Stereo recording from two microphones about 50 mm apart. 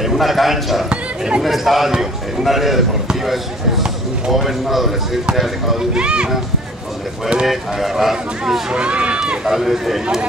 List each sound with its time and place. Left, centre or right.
0.0 s speech: centre
5.9 s speech: centre
7.4 s speech: centre
8.7 s speech: right
9.2 s speech: centre